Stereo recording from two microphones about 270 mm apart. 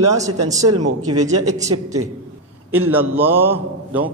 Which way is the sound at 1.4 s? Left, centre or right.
Right.